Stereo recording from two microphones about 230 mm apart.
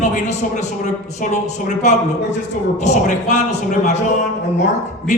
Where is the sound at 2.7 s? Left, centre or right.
Left.